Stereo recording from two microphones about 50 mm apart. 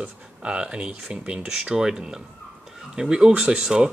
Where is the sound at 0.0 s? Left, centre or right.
Right.